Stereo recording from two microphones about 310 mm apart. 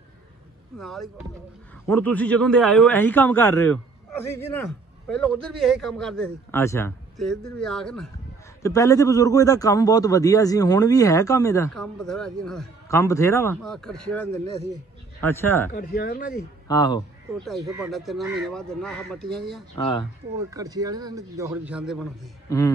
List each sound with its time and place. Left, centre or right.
0.7 s a man's voice: centre
5.0 s a man's voice: centre
15.7 s speech: left
16.6 s a man's voice: centre
17.6 s a man's voice: centre
20.3 s a man's voice: centre